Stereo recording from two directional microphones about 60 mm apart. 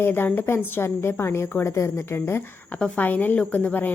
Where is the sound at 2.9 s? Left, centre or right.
Left.